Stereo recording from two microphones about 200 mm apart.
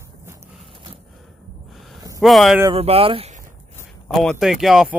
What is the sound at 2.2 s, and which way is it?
Speech, centre (ahead or behind).